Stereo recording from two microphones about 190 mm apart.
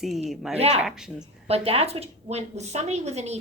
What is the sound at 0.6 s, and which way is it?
Speech, 35° right (ahead or behind).